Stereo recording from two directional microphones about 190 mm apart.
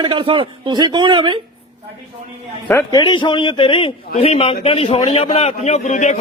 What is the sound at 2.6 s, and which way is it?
A man's voice, 15° left (ahead or behind).